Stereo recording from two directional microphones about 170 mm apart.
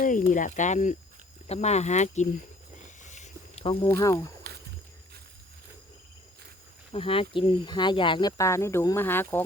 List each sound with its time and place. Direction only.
0.0 s speech: 50° left (ahead or behind)
3.0 s a sound: 45° left (ahead or behind)
3.9 s speech: 20° left (ahead or behind)
6.9 s speech: 30° left (ahead or behind)
8.4 s speech: 15° left (ahead or behind)